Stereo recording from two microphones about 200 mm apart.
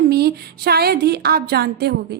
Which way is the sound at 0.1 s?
50° right (ahead or behind).